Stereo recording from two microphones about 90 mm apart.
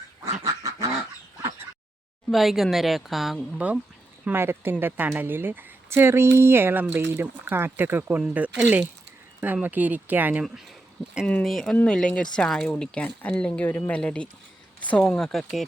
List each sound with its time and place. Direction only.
0.4 s duck: 40° right (ahead or behind)
2.3 s a woman's voice: centre (ahead or behind)
3.6 s a woman's voice: 15° right (ahead or behind)
10.4 s a woman's voice: 5° right (ahead or behind); by 15.2 s 15° left (ahead or behind)
15.2 s a woman's voice: 5° left (ahead or behind)